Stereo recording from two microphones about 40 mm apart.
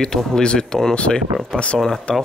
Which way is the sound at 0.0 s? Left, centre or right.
Centre.